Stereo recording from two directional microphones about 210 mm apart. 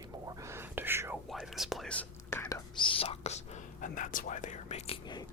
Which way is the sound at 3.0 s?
30° left (ahead or behind).